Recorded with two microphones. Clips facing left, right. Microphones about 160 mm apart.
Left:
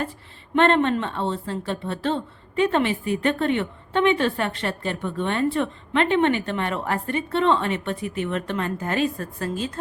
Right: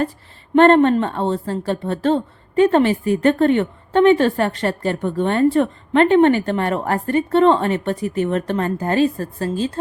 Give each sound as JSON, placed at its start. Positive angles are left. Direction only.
{"t": 0.5, "sound": "a woman's voice", "side_deg": -45}